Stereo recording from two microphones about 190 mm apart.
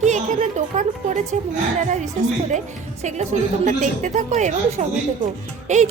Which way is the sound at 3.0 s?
40° right (ahead or behind).